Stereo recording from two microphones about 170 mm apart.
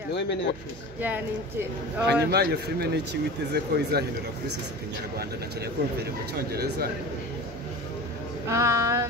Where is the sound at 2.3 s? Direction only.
70° right (ahead or behind).